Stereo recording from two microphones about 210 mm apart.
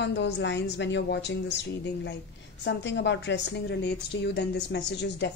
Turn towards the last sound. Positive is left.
turn(degrees=55)  # may be behind; listen again after turning